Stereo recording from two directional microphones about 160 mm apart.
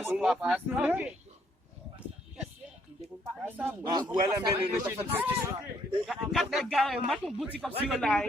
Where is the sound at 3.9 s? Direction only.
25° right (ahead or behind).